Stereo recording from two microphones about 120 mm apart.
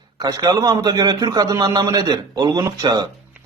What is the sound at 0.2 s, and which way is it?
Speech, 30° right (ahead or behind).